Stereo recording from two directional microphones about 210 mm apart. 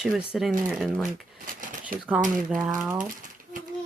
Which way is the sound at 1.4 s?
40° right (ahead or behind).